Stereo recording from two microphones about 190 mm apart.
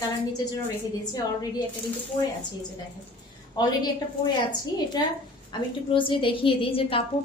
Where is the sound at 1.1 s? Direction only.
20° left (ahead or behind).